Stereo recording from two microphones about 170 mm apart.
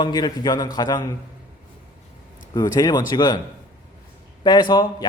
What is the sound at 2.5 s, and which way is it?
Speech, 25° left (ahead or behind).